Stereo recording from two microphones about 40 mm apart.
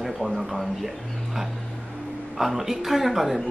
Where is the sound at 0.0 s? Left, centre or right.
Centre.